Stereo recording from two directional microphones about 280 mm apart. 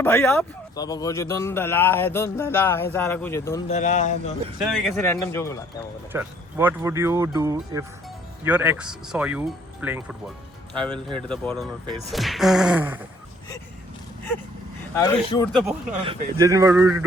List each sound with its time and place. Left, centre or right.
0.0 s speech: centre
3.7 s speech: left
4.6 s speech: centre
6.1 s speech: centre
14.9 s speech: centre
15.5 s speech: centre